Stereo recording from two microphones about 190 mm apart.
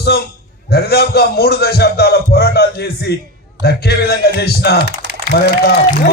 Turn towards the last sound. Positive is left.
turn(degrees=55)  # may be behind; listen again after turning